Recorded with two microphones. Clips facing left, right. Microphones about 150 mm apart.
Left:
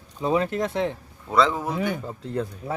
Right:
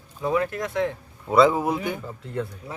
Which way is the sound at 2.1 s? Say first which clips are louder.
Left 2 dB; 35° left (ahead or behind).